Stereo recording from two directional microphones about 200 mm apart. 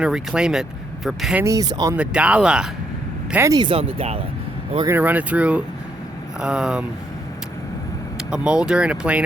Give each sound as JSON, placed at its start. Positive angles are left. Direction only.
{"t": 0.0, "sound": "speech", "side_deg": -5}
{"t": 1.5, "sound": "speech", "side_deg": -20}
{"t": 2.0, "sound": "speech", "side_deg": -5}
{"t": 3.3, "sound": "speech", "side_deg": -15}
{"t": 4.9, "sound": "speech", "side_deg": -10}
{"t": 8.3, "sound": "speech", "side_deg": -5}